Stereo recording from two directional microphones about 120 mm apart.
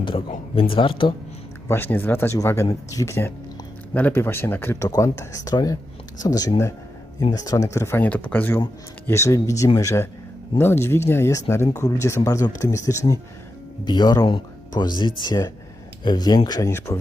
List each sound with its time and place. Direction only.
0.5 s speech: 50° left (ahead or behind)
1.6 s speech: 20° left (ahead or behind)
13.8 s speech: 35° left (ahead or behind)